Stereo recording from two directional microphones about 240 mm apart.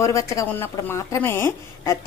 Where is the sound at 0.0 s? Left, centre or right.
Centre.